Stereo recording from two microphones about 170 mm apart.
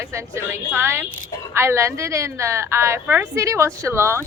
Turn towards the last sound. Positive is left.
turn(degrees=-15)  # may be behind; listen again after turning